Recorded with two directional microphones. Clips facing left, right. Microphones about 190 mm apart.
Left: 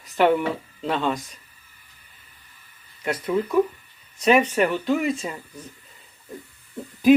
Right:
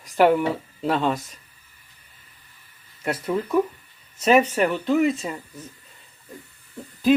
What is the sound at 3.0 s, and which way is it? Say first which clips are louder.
Speech: left 1 dB; 5° right (ahead or behind).